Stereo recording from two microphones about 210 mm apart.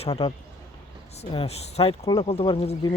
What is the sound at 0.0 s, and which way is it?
Speech, 25° left (ahead or behind).